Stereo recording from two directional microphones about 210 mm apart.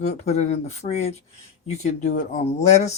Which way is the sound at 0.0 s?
30° left (ahead or behind).